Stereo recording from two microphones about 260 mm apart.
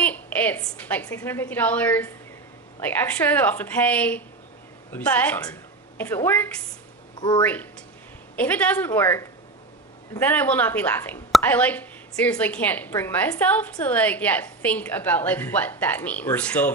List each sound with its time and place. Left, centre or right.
0.0 s a woman's voice: centre
8.4 s speech: centre